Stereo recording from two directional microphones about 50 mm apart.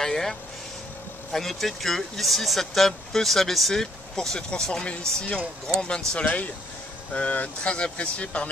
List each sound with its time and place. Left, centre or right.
0.0 s vehicle: centre
1.3 s speech: centre; by 8.5 s left